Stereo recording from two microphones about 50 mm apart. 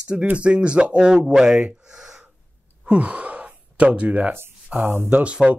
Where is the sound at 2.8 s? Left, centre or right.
Right.